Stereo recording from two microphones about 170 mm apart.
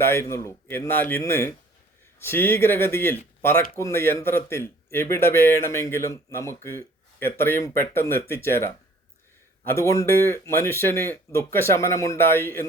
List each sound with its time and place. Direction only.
0.0 s speech: 15° left (ahead or behind)